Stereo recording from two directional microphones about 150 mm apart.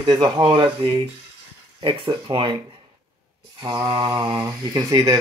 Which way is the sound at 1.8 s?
30° right (ahead or behind).